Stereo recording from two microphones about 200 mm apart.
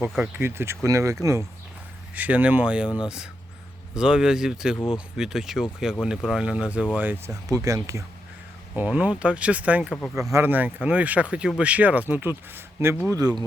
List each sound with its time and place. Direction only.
0.1 s speech: 10° right (ahead or behind)
3.9 s speech: 5° right (ahead or behind)